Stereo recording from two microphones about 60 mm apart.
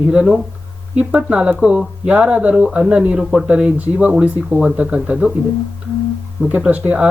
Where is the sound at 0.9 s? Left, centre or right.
Right.